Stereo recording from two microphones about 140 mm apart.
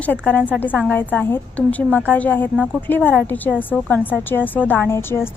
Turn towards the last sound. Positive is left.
turn(degrees=15)  # may be behind; listen again after turning